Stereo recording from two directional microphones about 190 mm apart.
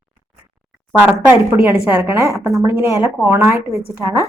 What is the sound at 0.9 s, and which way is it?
A woman's voice, 5° right (ahead or behind).